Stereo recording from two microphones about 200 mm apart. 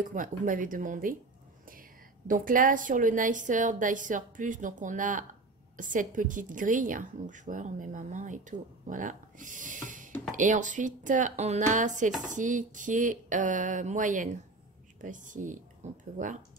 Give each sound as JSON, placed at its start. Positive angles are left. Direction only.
{"t": 0.0, "sound": "a woman's voice", "side_deg": -40}